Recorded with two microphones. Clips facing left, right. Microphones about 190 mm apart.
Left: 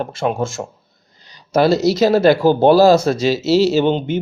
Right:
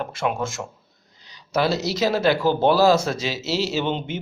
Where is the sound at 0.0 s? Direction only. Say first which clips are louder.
Left 5 dB; 30° left (ahead or behind).